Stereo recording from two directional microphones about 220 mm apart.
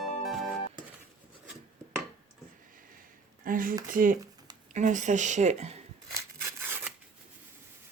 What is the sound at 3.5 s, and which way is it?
Speech, 40° right (ahead or behind).